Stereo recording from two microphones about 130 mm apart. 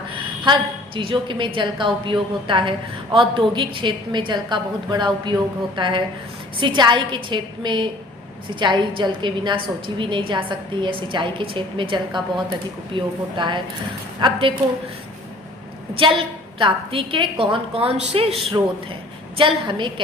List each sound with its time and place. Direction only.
0.9 s a woman's voice: 40° right (ahead or behind)
16.0 s a woman's voice: 40° right (ahead or behind)
18.5 s a woman's voice: 35° right (ahead or behind)